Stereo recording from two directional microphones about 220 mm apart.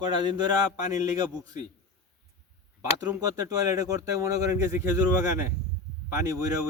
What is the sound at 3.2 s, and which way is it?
Speech, 15° right (ahead or behind).